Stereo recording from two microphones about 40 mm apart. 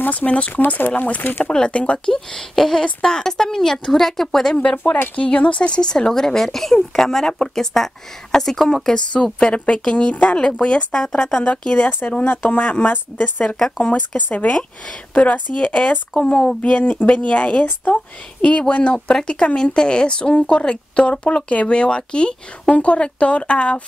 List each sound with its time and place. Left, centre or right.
0.0 s a woman's voice: left
1.5 s speech: left
2.1 s speech: centre
5.1 s speech: left; by 9.0 s centre
9.1 s speech: left
12.0 s a woman's voice: left
13.9 s a woman's voice: left
18.9 s speech: centre